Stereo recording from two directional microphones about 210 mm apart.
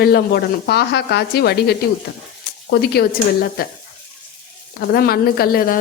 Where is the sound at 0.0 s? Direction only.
50° left (ahead or behind).